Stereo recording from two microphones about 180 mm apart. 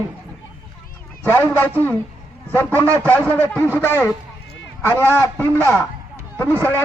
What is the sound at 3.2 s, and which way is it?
Speech, 10° left (ahead or behind).